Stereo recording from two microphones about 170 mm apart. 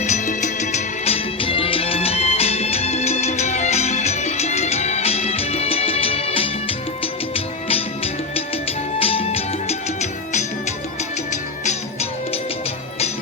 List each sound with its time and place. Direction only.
0.0 s music: 45° left (ahead or behind)